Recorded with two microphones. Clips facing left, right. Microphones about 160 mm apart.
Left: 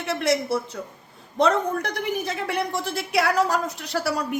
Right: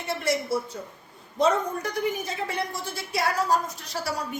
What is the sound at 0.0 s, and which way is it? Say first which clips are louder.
A woman's voice: left 4 dB; 75° left (ahead or behind).